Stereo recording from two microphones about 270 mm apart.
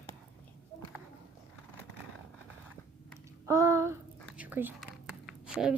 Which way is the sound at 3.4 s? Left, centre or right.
Centre.